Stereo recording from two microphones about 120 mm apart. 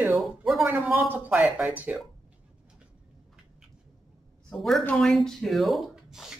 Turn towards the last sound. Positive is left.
turn(degrees=0)  # may be behind; listen again after turning